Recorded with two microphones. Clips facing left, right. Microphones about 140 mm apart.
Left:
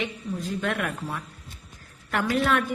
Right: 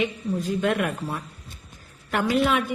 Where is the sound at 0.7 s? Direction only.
20° right (ahead or behind).